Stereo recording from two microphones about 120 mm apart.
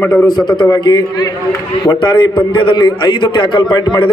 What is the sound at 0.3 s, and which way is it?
A man's voice, 40° left (ahead or behind).